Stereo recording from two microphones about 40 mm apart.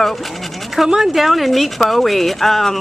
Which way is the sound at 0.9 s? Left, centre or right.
Centre.